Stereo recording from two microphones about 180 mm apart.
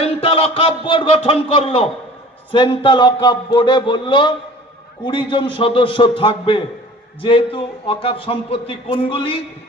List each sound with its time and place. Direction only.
0.0 s a man's voice: 30° left (ahead or behind)